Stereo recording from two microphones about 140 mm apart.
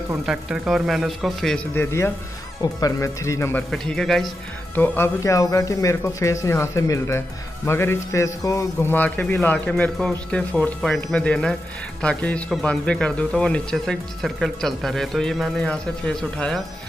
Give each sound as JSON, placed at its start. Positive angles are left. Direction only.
{"t": 0.3, "sound": "a man's voice", "side_deg": -5}
{"t": 1.7, "sound": "speech", "side_deg": 20}
{"t": 3.7, "sound": "a man's voice", "side_deg": 5}
{"t": 4.7, "sound": "a man's voice", "side_deg": 15}